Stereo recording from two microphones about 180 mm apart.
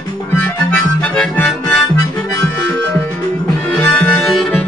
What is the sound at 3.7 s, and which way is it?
Music, 10° left (ahead or behind).